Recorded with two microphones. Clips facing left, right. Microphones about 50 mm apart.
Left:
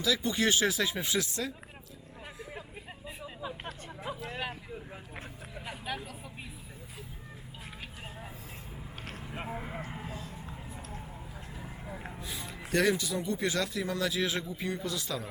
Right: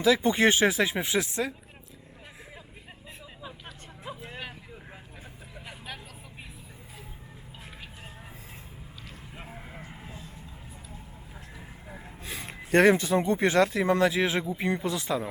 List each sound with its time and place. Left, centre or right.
0.0 s speech: right
3.4 s vehicle: centre
5.5 s vehicle: centre
9.3 s vehicle: centre
12.2 s speech: right